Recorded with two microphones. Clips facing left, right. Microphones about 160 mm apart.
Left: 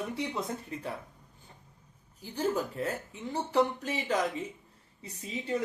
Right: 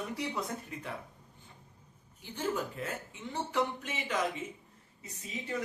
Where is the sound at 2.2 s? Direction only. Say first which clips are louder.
Left 4 dB; 35° left (ahead or behind).